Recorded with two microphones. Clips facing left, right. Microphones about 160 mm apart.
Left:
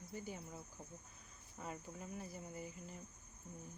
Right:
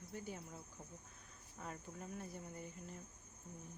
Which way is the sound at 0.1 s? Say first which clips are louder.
Even; 5° left (ahead or behind).